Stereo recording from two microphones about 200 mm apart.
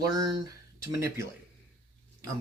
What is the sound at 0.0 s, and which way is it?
Speech, 20° right (ahead or behind).